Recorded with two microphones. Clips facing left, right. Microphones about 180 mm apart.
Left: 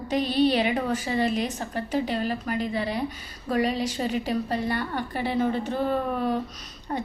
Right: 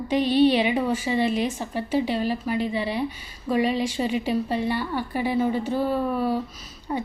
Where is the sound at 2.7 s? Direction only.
40° left (ahead or behind).